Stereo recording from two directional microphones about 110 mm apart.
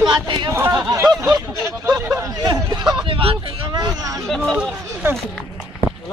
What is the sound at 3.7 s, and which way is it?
Hubbub, 40° right (ahead or behind).